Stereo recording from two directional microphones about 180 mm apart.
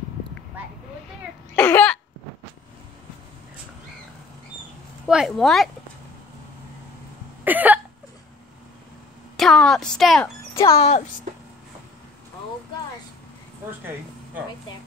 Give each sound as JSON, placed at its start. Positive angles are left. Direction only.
{"t": 1.5, "sound": "cough", "side_deg": 10}
{"t": 5.0, "sound": "speech", "side_deg": 0}
{"t": 7.4, "sound": "cough", "side_deg": -10}
{"t": 9.4, "sound": "a sound", "side_deg": 5}
{"t": 10.2, "sound": "music", "side_deg": 15}
{"t": 10.7, "sound": "speech", "side_deg": 35}